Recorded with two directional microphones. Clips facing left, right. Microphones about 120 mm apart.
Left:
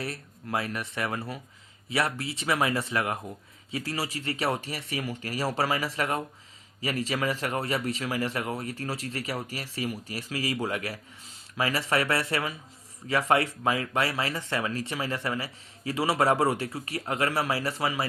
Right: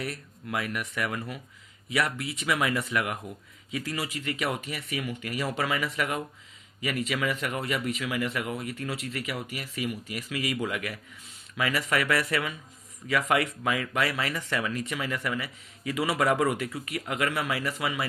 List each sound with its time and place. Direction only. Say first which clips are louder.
0.0 s speech: even; 30° left (ahead or behind)